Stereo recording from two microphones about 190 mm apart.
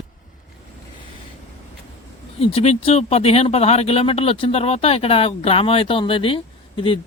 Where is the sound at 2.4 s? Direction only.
30° left (ahead or behind).